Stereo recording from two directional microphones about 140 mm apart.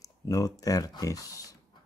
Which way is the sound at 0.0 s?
25° left (ahead or behind).